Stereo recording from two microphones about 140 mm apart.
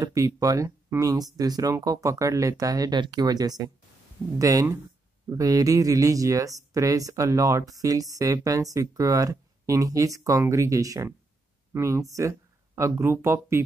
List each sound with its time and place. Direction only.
0.0 s speech: 25° right (ahead or behind)